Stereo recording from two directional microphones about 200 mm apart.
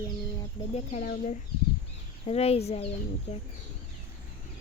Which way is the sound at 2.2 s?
30° left (ahead or behind).